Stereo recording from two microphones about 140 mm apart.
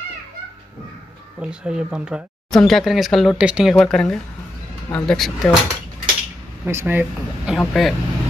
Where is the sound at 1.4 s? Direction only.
5° right (ahead or behind).